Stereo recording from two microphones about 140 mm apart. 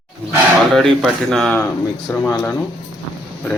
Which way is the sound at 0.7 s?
Centre (ahead or behind).